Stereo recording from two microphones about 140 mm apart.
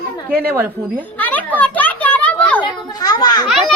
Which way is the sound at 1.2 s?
10° left (ahead or behind).